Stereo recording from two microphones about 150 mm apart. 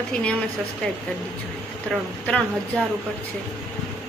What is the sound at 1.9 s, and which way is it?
Speech, 5° left (ahead or behind).